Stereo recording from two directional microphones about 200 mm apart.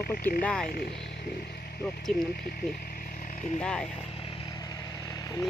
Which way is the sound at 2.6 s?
15° left (ahead or behind).